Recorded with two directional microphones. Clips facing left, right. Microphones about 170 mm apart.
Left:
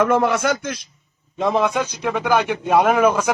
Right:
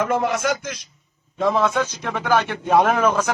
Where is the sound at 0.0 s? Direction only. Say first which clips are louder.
Left 4 dB; 65° left (ahead or behind).